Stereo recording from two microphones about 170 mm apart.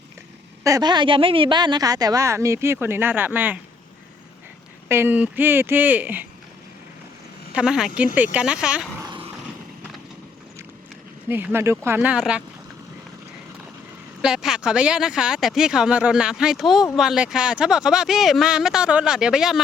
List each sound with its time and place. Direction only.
0.6 s a woman's voice: 20° right (ahead or behind)
4.9 s speech: 10° right (ahead or behind)
7.5 s speech: 5° right (ahead or behind)
9.0 s vehicle: 30° right (ahead or behind)
11.3 s speech: 10° right (ahead or behind)
11.9 s speech: 5° right (ahead or behind)
14.2 s speech: 5° right (ahead or behind)